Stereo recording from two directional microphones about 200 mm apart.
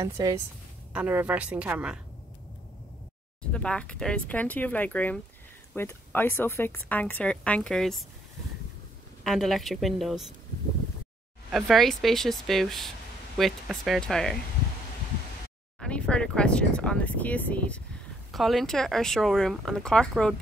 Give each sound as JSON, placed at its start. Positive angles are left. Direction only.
{"t": 0.0, "sound": "a woman's voice", "side_deg": -15}
{"t": 3.5, "sound": "speech", "side_deg": 5}
{"t": 9.2, "sound": "speech", "side_deg": 0}
{"t": 11.5, "sound": "speech", "side_deg": 0}
{"t": 15.8, "sound": "speech", "side_deg": 5}